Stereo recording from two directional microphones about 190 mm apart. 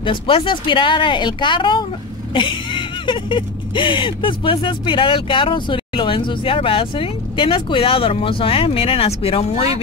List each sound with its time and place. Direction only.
0.0 s speech: 25° left (ahead or behind)